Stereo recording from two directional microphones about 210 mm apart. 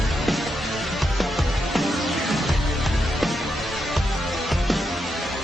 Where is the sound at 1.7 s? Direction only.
Centre (ahead or behind).